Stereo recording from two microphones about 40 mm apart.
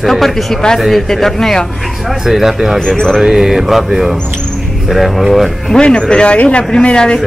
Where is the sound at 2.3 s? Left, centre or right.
Centre.